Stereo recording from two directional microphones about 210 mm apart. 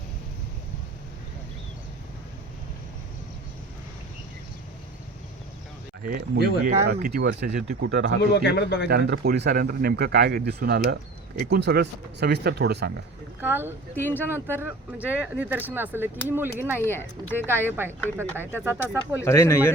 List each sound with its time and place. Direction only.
6.1 s speech: 45° right (ahead or behind)
8.2 s a man's voice: 50° left (ahead or behind)
8.9 s speech: 50° right (ahead or behind)
13.4 s speech: 10° right (ahead or behind)
13.9 s speech: 10° left (ahead or behind)
14.4 s speech: 10° right (ahead or behind)
16.8 s speech: 10° left (ahead or behind)
17.6 s speech: 10° right (ahead or behind)
19.2 s speech: 15° left (ahead or behind)